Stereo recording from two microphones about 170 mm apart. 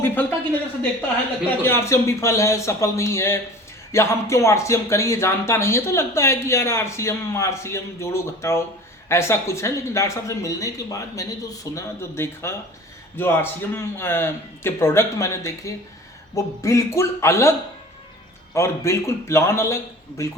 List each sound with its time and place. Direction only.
0.0 s speech: 10° left (ahead or behind)
1.6 s speech: 15° left (ahead or behind)
18.5 s speech: 15° left (ahead or behind)